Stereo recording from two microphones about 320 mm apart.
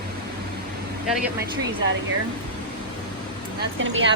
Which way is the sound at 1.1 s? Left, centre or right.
Centre.